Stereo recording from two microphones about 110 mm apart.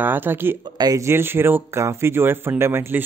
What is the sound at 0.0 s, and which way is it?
Speech, 20° right (ahead or behind).